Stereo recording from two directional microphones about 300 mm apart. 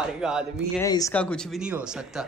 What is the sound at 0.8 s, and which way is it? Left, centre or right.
A man's voice, centre.